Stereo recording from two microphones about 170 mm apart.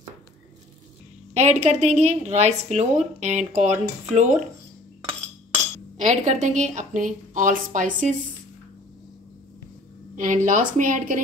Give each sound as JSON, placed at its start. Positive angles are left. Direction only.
{"t": 1.3, "sound": "a woman's voice", "side_deg": -40}
{"t": 5.9, "sound": "a woman's voice", "side_deg": -45}
{"t": 10.1, "sound": "a woman's voice", "side_deg": -50}